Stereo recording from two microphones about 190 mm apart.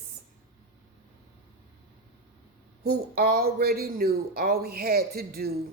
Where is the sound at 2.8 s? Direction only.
50° right (ahead or behind).